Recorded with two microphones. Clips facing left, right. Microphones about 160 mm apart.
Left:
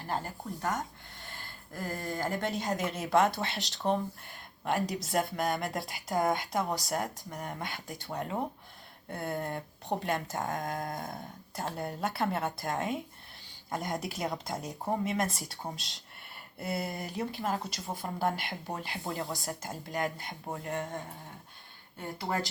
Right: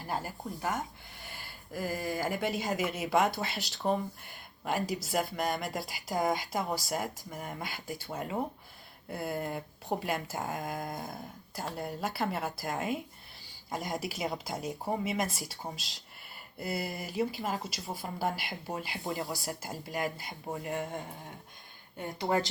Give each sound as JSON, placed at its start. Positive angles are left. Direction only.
{"t": 0.1, "sound": "speech", "side_deg": -10}
{"t": 21.9, "sound": "speech", "side_deg": -20}